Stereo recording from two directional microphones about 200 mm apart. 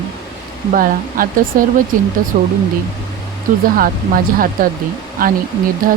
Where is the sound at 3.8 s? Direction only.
45° right (ahead or behind).